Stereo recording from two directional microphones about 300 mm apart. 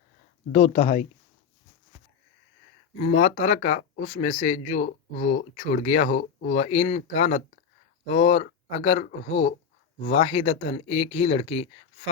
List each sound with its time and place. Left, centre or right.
0.5 s speech: left
3.0 s speech: left